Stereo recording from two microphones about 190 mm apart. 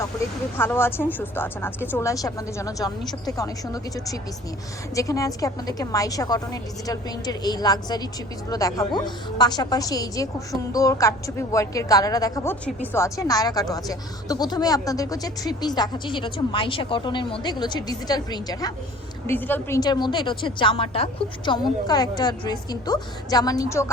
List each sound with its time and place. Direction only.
0.5 s a woman's voice: 10° left (ahead or behind)